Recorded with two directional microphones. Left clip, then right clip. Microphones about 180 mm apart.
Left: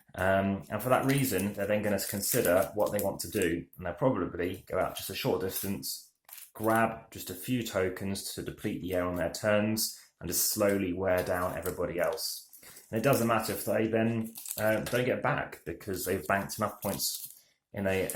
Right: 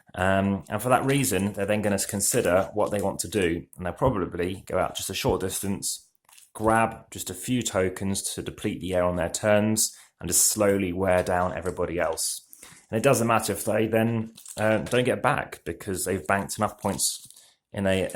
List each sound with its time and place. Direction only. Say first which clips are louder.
0.1 s speech: right 4 dB; 35° right (ahead or behind)